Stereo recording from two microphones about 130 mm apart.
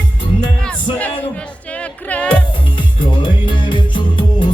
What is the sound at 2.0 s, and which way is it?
Music, 10° left (ahead or behind).